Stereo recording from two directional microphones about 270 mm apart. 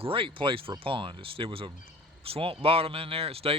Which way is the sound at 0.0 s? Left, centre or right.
Centre.